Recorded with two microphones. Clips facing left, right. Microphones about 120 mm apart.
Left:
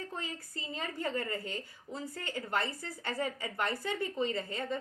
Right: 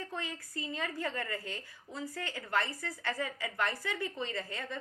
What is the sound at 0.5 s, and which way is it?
A woman's voice, 30° left (ahead or behind).